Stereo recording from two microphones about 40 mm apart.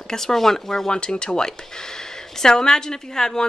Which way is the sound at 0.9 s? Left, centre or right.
Left.